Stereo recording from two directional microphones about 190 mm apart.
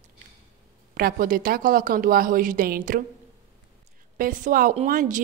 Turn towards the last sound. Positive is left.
turn(degrees=-45)  # may be behind; listen again after turning